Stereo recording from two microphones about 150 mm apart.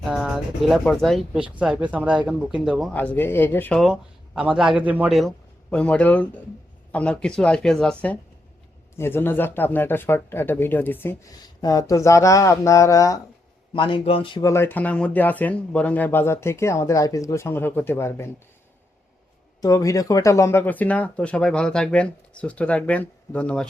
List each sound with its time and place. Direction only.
0.1 s speech: 5° right (ahead or behind)
2.9 s speech: 10° left (ahead or behind)
4.4 s speech: 5° right (ahead or behind)
5.7 s speech: 5° left (ahead or behind)
11.3 s speech: 25° left (ahead or behind)
13.7 s a man's voice: 35° left (ahead or behind)
14.4 s speech: 15° left (ahead or behind)
19.6 s speech: 20° left (ahead or behind)